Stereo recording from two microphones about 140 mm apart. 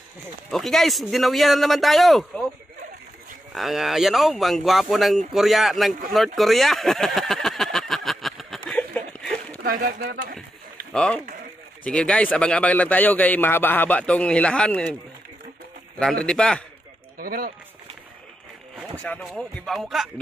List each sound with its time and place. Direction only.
0.5 s speech: centre (ahead or behind)
3.5 s speech: centre (ahead or behind)
6.1 s a sound: centre (ahead or behind)
9.7 s speech: 90° right
10.9 s a man's voice: 5° left (ahead or behind)
16.0 s speech: 5° left (ahead or behind)
17.2 s speech: 90° right
19.0 s speech: 10° left (ahead or behind)